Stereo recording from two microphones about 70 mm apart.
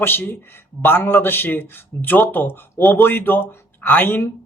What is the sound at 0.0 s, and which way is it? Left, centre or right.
A man's voice, left.